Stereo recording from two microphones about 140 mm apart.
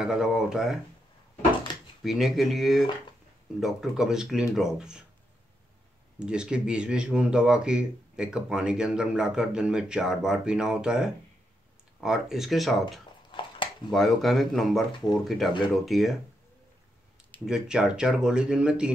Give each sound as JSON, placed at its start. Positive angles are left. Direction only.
{"t": 0.0, "sound": "speech", "side_deg": -5}
{"t": 2.0, "sound": "speech", "side_deg": 0}
{"t": 6.1, "sound": "speech", "side_deg": -5}
{"t": 13.3, "sound": "dog", "side_deg": 35}
{"t": 13.8, "sound": "speech", "side_deg": 0}
{"t": 17.5, "sound": "speech", "side_deg": -5}